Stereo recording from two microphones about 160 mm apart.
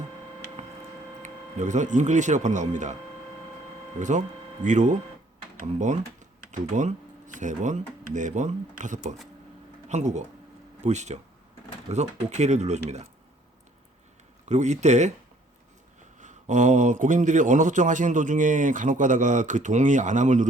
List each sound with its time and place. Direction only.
1.2 s speech: 50° right (ahead or behind)
4.0 s a man's voice: 50° right (ahead or behind)
14.4 s a man's voice: 45° right (ahead or behind)
16.2 s a man's voice: 50° right (ahead or behind)